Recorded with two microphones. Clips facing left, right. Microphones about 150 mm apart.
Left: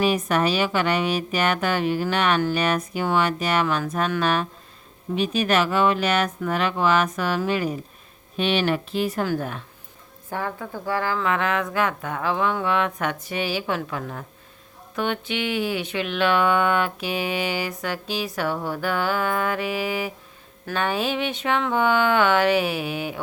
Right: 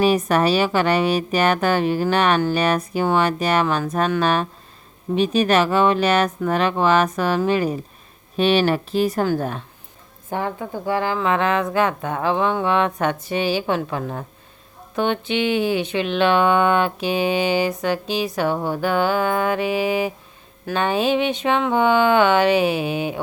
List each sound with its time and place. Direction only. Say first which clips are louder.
0.0 s a woman's voice: right 4 dB; 35° right (ahead or behind)
10.2 s speech: right 4 dB; 20° right (ahead or behind)